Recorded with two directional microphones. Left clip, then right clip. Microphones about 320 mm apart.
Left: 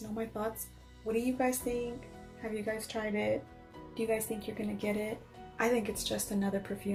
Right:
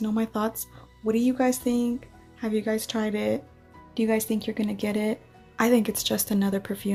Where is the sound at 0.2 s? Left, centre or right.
Right.